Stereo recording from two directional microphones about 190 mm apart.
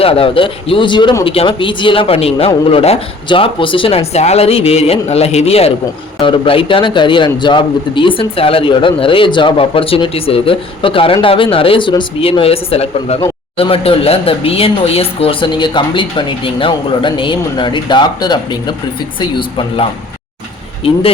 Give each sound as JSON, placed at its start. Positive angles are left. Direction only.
{"t": 0.0, "sound": "speech", "side_deg": 30}